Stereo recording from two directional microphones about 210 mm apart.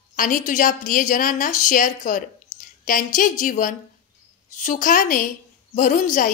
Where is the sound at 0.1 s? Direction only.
40° left (ahead or behind).